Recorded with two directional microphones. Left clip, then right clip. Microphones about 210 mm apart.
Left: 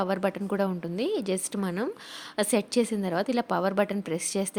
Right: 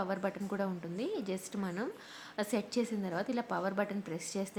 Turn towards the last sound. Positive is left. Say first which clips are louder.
# left 9 dB
turn(degrees=40)  # may be behind; listen again after turning